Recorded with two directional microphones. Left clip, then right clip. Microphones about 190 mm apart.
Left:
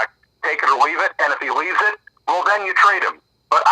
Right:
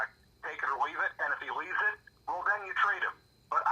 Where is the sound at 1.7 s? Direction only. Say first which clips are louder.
Left 13 dB; 30° left (ahead or behind).